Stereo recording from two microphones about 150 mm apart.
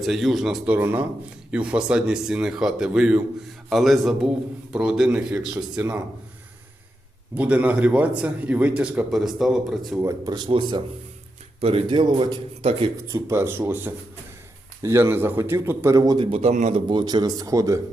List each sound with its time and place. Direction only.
0.0 s a man's voice: centre (ahead or behind)
7.3 s a man's voice: 10° right (ahead or behind)
10.0 s speech: 25° right (ahead or behind)
13.1 s a man's voice: 20° right (ahead or behind)
16.1 s a man's voice: 40° right (ahead or behind)
16.9 s speech: 30° right (ahead or behind)